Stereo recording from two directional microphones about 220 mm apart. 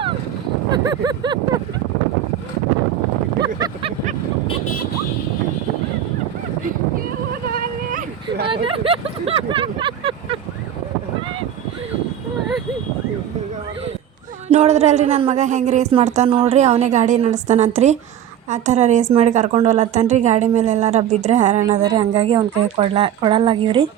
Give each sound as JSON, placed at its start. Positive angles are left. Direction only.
{"t": 0.7, "sound": "speech", "side_deg": -20}
{"t": 3.4, "sound": "a sound", "side_deg": -20}
{"t": 7.5, "sound": "a sound", "side_deg": -40}
{"t": 8.4, "sound": "vehicle", "side_deg": -25}
{"t": 14.4, "sound": "speech", "side_deg": -30}
{"t": 21.8, "sound": "speech", "side_deg": -20}